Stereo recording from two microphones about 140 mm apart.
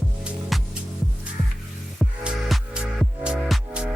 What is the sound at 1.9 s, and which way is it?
Music, centre (ahead or behind).